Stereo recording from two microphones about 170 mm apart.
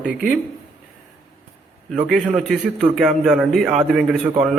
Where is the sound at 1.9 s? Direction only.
5° right (ahead or behind).